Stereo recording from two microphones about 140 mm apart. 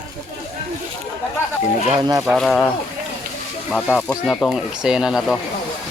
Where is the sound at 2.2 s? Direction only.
Centre (ahead or behind).